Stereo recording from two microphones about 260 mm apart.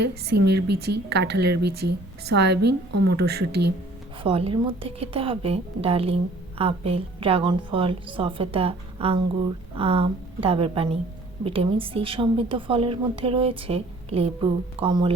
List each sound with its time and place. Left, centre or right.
0.3 s speech: right
4.2 s a woman's voice: right